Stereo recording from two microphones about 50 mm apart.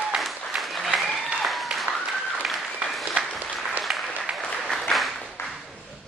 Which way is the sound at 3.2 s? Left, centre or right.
Right.